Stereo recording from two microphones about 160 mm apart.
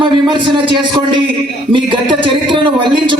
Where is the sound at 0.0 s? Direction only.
30° right (ahead or behind).